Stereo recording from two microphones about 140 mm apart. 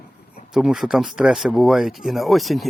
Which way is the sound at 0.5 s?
5° right (ahead or behind).